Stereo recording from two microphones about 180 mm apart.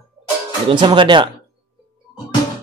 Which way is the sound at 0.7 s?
25° right (ahead or behind).